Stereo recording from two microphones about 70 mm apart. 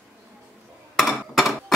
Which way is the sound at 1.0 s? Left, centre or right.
Centre.